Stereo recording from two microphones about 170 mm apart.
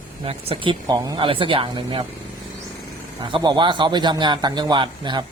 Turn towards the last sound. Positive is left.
turn(degrees=-25)  # may be behind; listen again after turning